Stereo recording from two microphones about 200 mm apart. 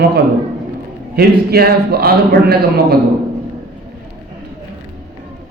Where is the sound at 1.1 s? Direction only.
50° right (ahead or behind).